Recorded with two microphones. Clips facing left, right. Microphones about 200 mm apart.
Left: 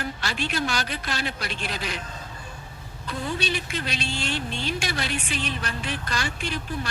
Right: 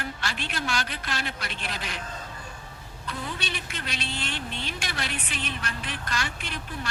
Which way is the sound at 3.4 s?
35° left (ahead or behind).